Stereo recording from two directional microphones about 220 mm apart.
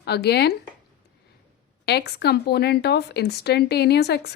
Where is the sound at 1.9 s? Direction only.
50° left (ahead or behind).